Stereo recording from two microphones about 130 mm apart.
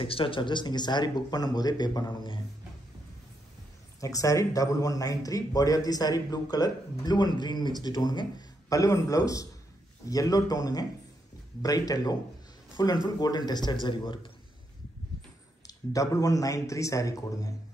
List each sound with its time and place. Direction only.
0.0 s speech: 40° left (ahead or behind)
4.0 s speech: 25° left (ahead or behind)
15.6 s speech: 25° left (ahead or behind)